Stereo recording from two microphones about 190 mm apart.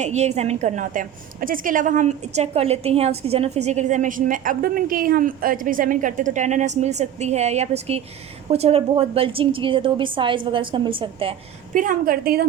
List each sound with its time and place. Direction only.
0.0 s a woman's voice: 35° right (ahead or behind)
11.7 s a woman's voice: 45° right (ahead or behind)